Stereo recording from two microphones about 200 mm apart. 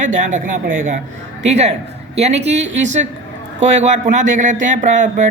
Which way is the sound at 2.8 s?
35° right (ahead or behind).